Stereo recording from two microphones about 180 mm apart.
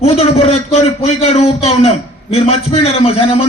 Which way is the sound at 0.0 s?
35° left (ahead or behind).